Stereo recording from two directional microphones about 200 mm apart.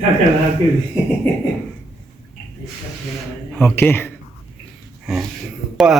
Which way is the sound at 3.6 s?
10° left (ahead or behind).